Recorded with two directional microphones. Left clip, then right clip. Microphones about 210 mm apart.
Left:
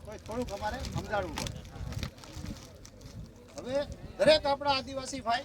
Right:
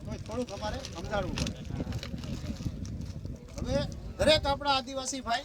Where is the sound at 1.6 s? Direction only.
20° left (ahead or behind).